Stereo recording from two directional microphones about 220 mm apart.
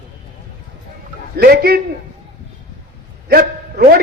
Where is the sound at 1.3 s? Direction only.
45° right (ahead or behind).